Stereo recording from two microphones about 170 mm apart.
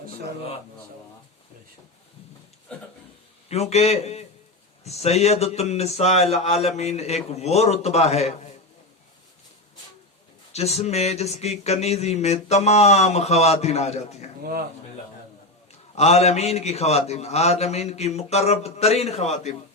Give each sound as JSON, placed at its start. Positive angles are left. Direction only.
{"t": 3.5, "sound": "speech", "side_deg": 40}
{"t": 10.5, "sound": "speech", "side_deg": 40}
{"t": 16.0, "sound": "speech", "side_deg": 40}